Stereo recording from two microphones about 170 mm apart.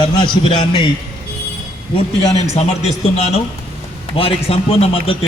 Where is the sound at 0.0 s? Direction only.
30° left (ahead or behind).